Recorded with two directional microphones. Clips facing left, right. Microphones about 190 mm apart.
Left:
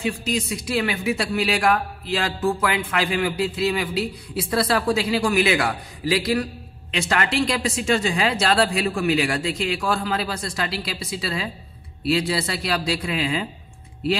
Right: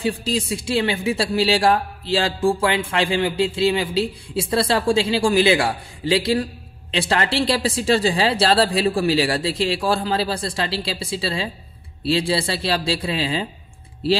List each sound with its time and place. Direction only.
0.0 s speech: 30° right (ahead or behind)